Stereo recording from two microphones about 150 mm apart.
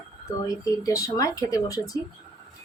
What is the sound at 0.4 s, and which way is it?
Speech, 20° left (ahead or behind).